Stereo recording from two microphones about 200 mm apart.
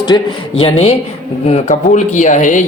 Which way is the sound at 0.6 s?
30° left (ahead or behind).